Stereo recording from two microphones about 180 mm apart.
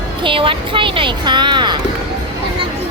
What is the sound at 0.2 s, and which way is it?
Speech, 30° right (ahead or behind).